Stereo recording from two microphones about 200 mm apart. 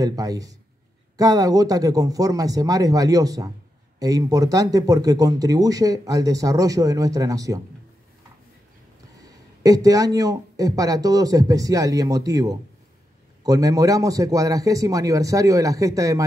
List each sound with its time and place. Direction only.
0.0 s speech: 20° right (ahead or behind)
9.2 s speech: 15° right (ahead or behind)